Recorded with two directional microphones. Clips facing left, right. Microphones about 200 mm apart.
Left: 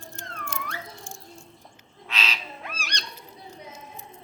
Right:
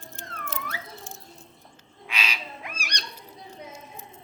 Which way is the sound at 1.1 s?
20° right (ahead or behind).